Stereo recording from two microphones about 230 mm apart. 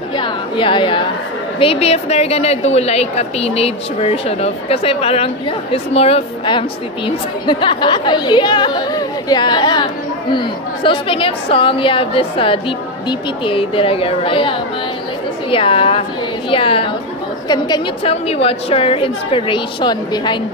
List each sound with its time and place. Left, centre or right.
0.2 s a sound: left
1.6 s a woman's voice: left
15.5 s a woman's voice: left